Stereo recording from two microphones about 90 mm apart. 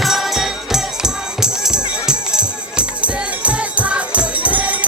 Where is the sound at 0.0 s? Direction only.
Centre (ahead or behind).